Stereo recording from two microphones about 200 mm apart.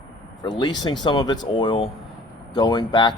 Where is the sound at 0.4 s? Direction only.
20° left (ahead or behind).